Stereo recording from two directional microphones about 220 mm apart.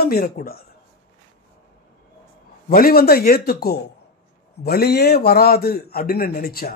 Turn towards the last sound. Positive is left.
turn(degrees=40)  # may be behind; listen again after turning